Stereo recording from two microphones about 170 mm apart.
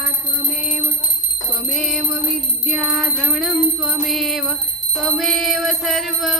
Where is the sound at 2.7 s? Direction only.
Centre (ahead or behind).